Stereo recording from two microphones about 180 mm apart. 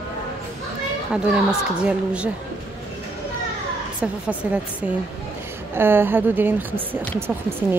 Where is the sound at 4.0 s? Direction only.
5° right (ahead or behind).